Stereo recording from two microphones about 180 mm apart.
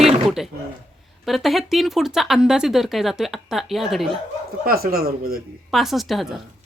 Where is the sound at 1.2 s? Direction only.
Centre (ahead or behind).